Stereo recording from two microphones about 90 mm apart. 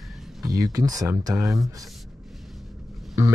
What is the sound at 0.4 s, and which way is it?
Speech, 40° right (ahead or behind).